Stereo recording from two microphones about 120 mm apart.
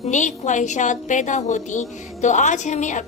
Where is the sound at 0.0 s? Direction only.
90° left.